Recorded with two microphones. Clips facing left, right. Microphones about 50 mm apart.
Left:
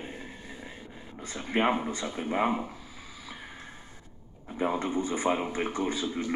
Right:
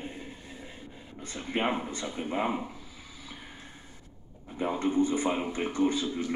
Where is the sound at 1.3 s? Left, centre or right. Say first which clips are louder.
Left 3 dB; left.